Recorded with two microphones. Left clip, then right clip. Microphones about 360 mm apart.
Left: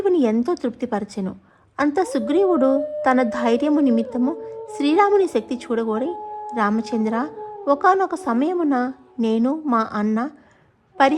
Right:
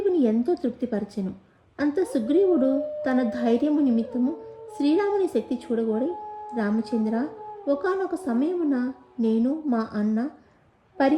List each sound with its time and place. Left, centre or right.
0.0 s a woman's voice: centre